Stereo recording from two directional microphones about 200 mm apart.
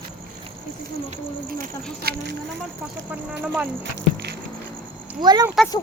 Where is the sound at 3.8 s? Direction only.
60° right (ahead or behind).